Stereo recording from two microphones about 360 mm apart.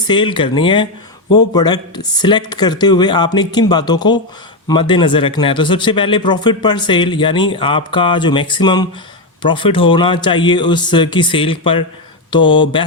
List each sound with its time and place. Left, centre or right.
0.1 s a man's voice: centre